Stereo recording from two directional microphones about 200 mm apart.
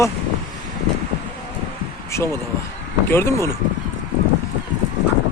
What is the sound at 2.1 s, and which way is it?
Speech, 15° left (ahead or behind).